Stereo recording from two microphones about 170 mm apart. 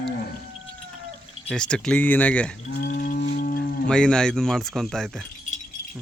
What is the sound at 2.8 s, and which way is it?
Moo, 55° left (ahead or behind).